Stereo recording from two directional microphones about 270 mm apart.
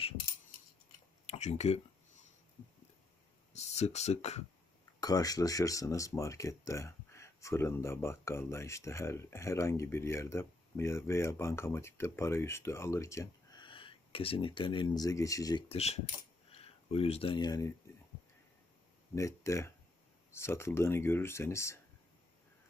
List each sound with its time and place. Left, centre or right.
1.2 s a sound: left
3.5 s speech: left
5.0 s speech: centre
19.1 s speech: centre